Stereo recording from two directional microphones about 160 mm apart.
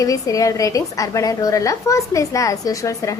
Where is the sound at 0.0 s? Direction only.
20° left (ahead or behind).